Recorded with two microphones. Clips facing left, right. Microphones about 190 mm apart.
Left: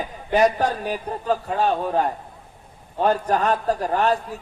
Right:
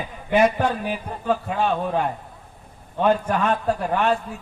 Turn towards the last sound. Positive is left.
turn(degrees=40)  # may be behind; listen again after turning